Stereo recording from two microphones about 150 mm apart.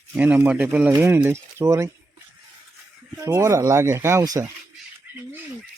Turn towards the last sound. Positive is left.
turn(degrees=-20)  # may be behind; listen again after turning